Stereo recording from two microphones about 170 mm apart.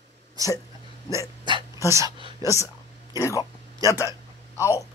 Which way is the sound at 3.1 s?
20° left (ahead or behind).